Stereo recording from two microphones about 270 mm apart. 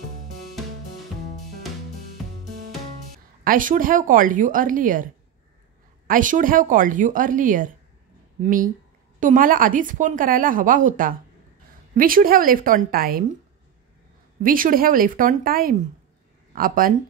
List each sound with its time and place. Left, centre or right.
3.4 s speech: right
6.0 s a woman's voice: right
14.4 s speech: right